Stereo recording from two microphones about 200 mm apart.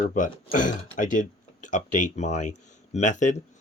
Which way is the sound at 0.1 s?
40° left (ahead or behind).